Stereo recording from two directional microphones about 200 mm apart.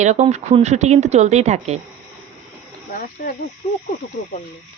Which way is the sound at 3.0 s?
45° left (ahead or behind).